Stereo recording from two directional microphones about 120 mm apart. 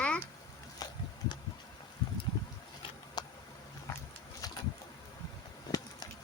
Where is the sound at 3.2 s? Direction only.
35° left (ahead or behind).